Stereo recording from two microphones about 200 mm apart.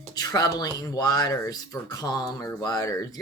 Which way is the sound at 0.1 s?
20° left (ahead or behind).